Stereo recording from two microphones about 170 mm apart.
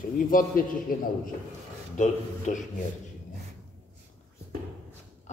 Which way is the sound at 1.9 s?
45° left (ahead or behind).